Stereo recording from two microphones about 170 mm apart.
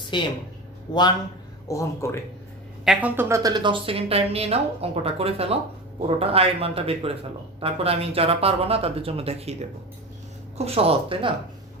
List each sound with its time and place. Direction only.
0.1 s speech: 30° left (ahead or behind)
2.8 s a woman's voice: 5° right (ahead or behind); by 9.6 s 35° right (ahead or behind)
10.6 s a woman's voice: 35° right (ahead or behind)